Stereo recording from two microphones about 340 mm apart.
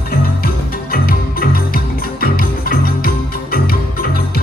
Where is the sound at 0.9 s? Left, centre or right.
Left.